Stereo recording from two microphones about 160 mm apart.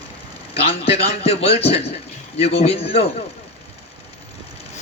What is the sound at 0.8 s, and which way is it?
Speech, 40° left (ahead or behind).